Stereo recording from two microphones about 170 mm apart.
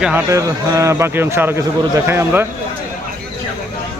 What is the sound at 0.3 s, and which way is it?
Speech, 20° right (ahead or behind).